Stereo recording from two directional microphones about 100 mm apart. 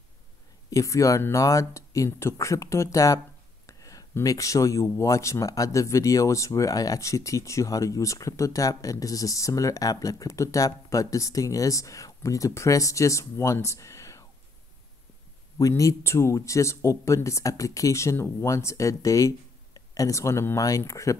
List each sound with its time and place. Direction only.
0.7 s speech: 30° left (ahead or behind)
15.5 s speech: 30° left (ahead or behind)